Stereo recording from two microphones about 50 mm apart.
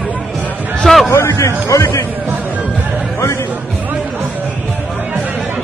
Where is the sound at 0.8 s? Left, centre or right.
Centre.